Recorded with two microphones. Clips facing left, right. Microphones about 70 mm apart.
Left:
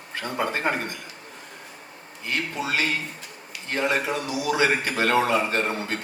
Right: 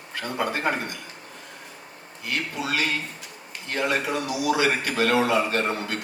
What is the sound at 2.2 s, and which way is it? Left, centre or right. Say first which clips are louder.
A man's voice: left 1 dB; left.